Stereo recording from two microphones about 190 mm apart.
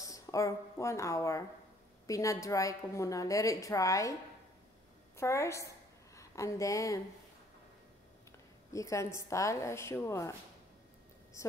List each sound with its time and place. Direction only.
0.0 s a woman's voice: 15° left (ahead or behind)
5.1 s a woman's voice: 15° left (ahead or behind)
8.7 s a woman's voice: 15° left (ahead or behind)